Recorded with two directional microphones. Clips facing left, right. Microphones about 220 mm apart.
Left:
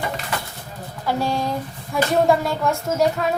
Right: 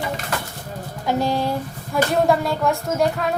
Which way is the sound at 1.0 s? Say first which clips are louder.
Right 2 dB; 15° right (ahead or behind).